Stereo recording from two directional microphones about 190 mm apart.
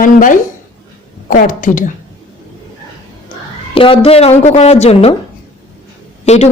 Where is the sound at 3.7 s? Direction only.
30° left (ahead or behind).